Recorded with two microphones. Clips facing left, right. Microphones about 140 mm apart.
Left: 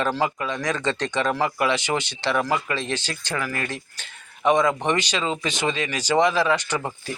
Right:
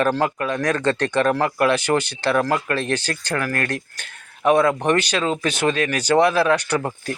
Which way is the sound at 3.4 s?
65° right (ahead or behind).